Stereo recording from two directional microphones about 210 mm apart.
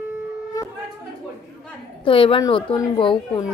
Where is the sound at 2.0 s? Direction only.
25° left (ahead or behind).